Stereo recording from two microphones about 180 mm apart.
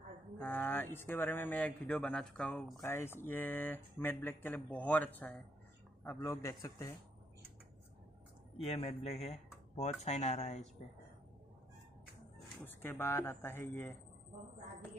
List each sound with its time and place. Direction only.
0.4 s a man's voice: 10° left (ahead or behind)
8.6 s speech: 35° left (ahead or behind)
12.6 s a man's voice: 15° left (ahead or behind)